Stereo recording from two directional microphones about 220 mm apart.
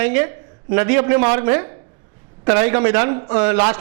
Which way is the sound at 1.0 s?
25° right (ahead or behind).